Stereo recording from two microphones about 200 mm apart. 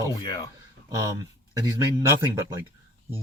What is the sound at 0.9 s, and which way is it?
Speech, 15° right (ahead or behind).